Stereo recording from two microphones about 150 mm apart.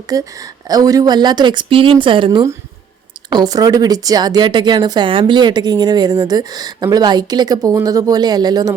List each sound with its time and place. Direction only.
0.1 s speech: 25° right (ahead or behind)